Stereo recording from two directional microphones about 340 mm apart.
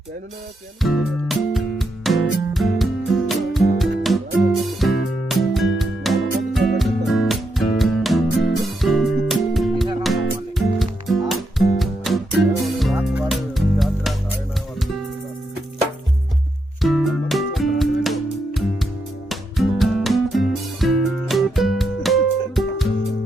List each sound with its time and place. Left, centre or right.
0.8 s music: centre
16.8 s music: centre